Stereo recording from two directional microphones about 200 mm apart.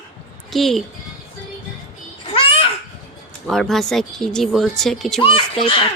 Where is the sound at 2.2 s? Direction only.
30° left (ahead or behind).